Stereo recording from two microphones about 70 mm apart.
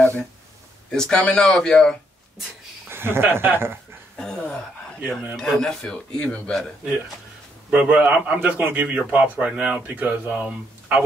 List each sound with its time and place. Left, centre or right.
0.0 s a sound: left
0.9 s speech: centre
2.9 s speech: right
4.2 s speech: centre
7.7 s speech: centre
10.3 s speech: centre